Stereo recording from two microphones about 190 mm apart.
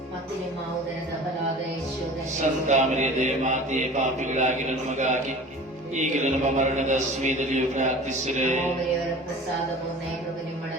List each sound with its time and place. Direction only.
2.4 s mantra: 40° right (ahead or behind)